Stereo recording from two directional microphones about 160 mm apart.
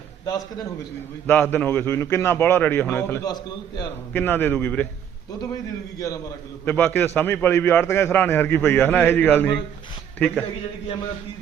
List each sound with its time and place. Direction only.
0.3 s a man's voice: 20° left (ahead or behind)
1.3 s a man's voice: 10° left (ahead or behind)
3.2 s a man's voice: 25° left (ahead or behind)
4.1 s a man's voice: 10° left (ahead or behind)
6.0 s a man's voice: 20° left (ahead or behind)